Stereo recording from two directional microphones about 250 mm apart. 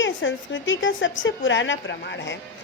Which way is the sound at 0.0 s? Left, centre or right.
Left.